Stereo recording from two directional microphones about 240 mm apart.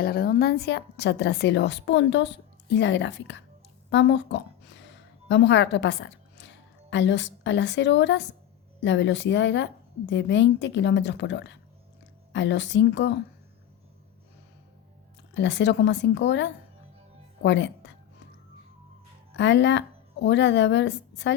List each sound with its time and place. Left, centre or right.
0.0 s a woman's voice: left
3.8 s a sound: left
5.3 s a woman's voice: left
15.4 s a woman's voice: left
19.4 s a woman's voice: left